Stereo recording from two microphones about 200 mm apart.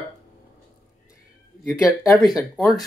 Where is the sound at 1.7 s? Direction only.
5° right (ahead or behind).